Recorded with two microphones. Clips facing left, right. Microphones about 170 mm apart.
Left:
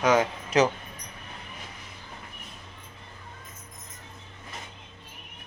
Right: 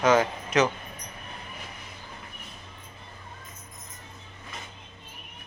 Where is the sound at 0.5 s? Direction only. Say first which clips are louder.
Left 1 dB; 35° left (ahead or behind).